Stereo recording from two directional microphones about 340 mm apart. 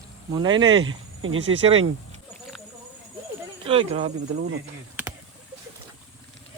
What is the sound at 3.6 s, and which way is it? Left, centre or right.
Speech, centre.